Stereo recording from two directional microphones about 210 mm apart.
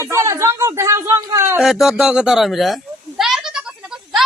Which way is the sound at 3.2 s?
Centre (ahead or behind).